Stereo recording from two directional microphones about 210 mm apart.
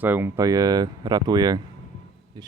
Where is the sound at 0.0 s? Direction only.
10° right (ahead or behind).